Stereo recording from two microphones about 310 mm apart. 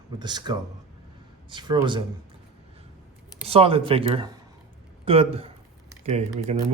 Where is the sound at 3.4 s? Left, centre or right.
Centre.